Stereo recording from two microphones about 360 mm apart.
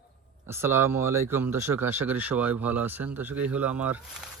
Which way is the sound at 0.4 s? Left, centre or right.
Centre.